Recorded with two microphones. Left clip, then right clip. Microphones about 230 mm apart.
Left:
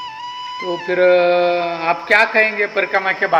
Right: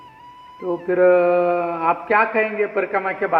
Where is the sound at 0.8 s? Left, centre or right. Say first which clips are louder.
Left 2 dB; centre.